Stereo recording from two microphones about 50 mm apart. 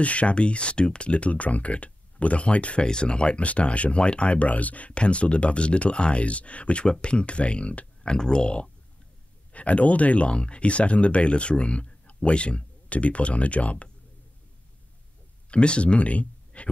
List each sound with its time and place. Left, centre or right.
0.0 s speech: left
15.5 s speech: left